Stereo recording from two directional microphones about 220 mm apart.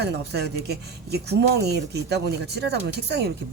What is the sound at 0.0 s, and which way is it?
Speech, 50° right (ahead or behind).